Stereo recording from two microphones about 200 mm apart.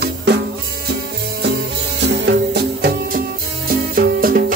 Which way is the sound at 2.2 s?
55° right (ahead or behind).